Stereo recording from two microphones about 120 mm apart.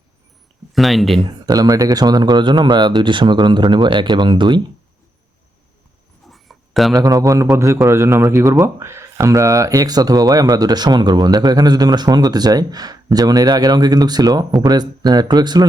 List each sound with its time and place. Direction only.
0.7 s speech: centre (ahead or behind)
1.2 s speech: 35° right (ahead or behind)
6.2 s a sound: centre (ahead or behind)
6.9 s speech: 30° right (ahead or behind)